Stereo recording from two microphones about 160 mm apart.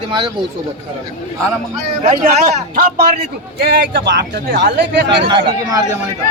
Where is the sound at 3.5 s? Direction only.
90° right.